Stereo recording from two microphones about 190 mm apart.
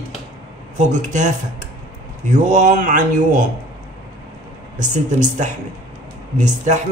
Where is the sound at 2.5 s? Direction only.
40° right (ahead or behind).